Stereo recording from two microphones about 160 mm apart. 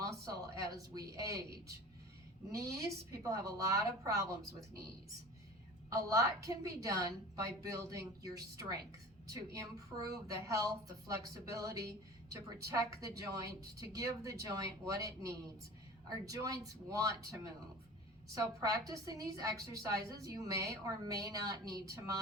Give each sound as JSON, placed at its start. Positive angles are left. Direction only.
{"t": 0.0, "sound": "a woman's voice", "side_deg": -20}
{"t": 5.9, "sound": "a woman's voice", "side_deg": -20}
{"t": 11.5, "sound": "a woman's voice", "side_deg": -20}